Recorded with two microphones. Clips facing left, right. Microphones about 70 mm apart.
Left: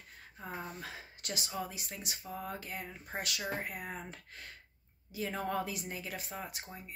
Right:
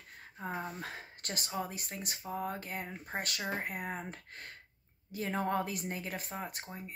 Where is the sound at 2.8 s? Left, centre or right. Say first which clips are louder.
Right 1 dB; right.